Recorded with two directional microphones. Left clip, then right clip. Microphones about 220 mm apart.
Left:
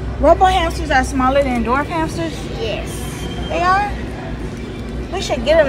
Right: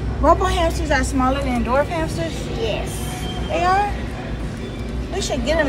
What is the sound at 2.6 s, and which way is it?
Speech, 40° left (ahead or behind).